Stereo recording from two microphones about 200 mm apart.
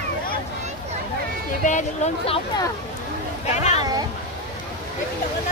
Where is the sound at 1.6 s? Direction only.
35° left (ahead or behind).